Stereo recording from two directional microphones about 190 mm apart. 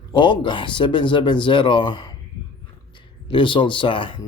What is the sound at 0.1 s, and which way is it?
Speech, 25° left (ahead or behind).